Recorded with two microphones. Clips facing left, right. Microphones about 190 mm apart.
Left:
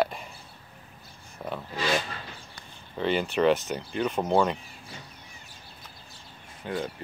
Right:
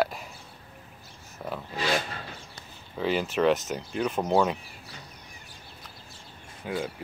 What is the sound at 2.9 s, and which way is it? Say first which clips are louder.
Speech: left 1 dB; centre (ahead or behind).